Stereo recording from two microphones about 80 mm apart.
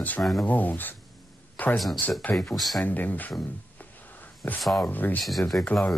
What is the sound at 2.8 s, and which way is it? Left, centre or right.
Speech, left.